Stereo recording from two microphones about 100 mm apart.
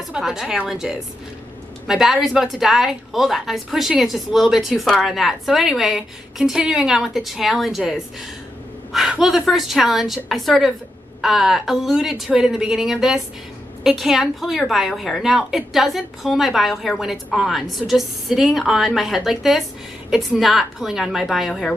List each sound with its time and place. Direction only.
0.1 s a woman's voice: 5° right (ahead or behind)